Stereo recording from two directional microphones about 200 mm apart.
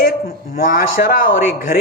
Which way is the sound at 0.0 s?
45° left (ahead or behind).